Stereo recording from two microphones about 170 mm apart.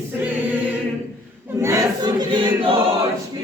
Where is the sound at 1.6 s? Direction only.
20° right (ahead or behind).